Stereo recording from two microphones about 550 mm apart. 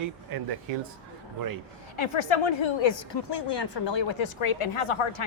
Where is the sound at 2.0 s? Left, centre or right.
Left.